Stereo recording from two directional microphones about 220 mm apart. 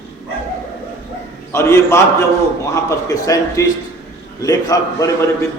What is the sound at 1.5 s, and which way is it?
A man's voice, 10° left (ahead or behind).